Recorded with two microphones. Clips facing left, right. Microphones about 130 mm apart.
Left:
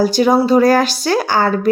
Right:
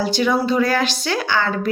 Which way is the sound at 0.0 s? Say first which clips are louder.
Left 6 dB; 40° left (ahead or behind).